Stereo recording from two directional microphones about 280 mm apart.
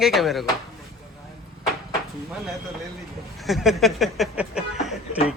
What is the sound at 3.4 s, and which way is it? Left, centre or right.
Speech, centre.